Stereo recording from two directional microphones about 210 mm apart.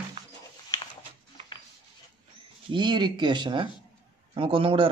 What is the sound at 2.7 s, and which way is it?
Speech, 20° right (ahead or behind).